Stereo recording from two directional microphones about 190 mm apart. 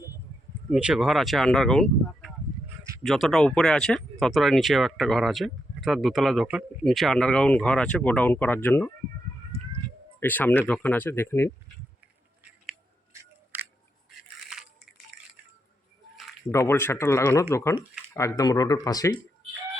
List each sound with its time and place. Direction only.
0.7 s speech: 5° right (ahead or behind)
10.2 s speech: 10° left (ahead or behind)
13.5 s a sound: 10° right (ahead or behind)
14.3 s crushing: centre (ahead or behind)
15.1 s a sound: centre (ahead or behind)
16.5 s speech: 15° left (ahead or behind)